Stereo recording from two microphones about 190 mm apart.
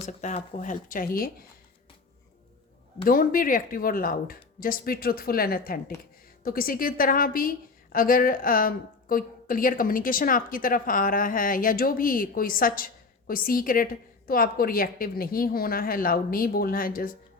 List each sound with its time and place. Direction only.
0.0 s a woman's voice: 40° left (ahead or behind)
3.0 s a woman's voice: 50° left (ahead or behind)